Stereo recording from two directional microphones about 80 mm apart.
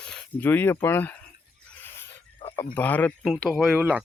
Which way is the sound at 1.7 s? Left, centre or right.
Left.